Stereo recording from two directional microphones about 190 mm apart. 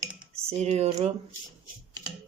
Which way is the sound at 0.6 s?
35° right (ahead or behind).